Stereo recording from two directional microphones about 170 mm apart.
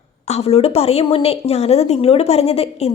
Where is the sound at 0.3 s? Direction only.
40° left (ahead or behind).